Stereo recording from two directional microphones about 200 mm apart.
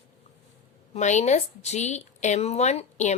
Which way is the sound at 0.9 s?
35° left (ahead or behind).